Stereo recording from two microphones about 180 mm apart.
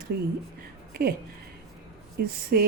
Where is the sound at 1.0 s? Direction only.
55° right (ahead or behind).